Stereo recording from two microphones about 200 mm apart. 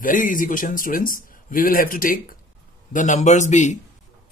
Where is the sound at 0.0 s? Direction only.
40° left (ahead or behind).